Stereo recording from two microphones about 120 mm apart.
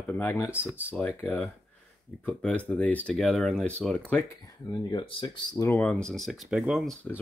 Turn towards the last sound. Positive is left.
turn(degrees=0)  # may be behind; listen again after turning